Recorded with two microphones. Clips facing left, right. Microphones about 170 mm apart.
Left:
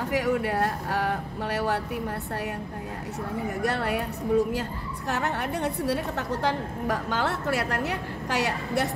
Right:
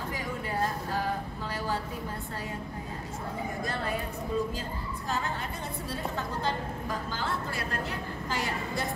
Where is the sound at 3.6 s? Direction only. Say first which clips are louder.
Left 7 dB; 70° left (ahead or behind).